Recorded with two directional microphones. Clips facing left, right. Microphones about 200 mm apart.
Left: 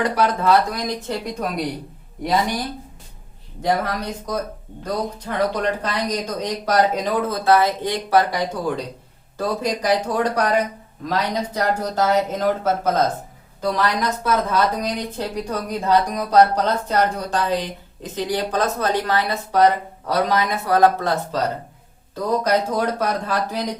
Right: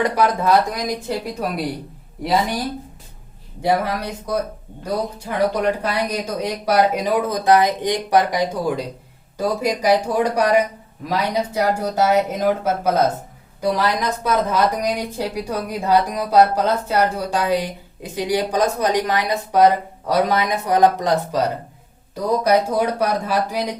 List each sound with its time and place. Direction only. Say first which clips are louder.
0.4 s a woman's voice: even; 10° right (ahead or behind)
3.6 s a woman's voice: right 2 dB; 10° right (ahead or behind)